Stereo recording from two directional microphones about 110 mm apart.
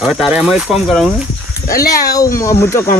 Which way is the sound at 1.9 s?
30° left (ahead or behind).